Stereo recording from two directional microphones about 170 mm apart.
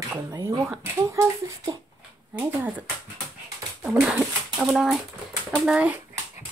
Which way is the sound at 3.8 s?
5° right (ahead or behind).